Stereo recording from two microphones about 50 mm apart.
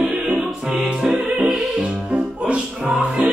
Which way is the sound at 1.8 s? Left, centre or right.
Centre.